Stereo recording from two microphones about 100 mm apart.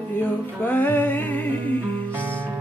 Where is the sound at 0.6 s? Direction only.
15° left (ahead or behind).